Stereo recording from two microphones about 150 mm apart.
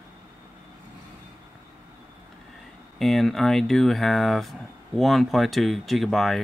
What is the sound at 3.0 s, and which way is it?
Speech, centre (ahead or behind).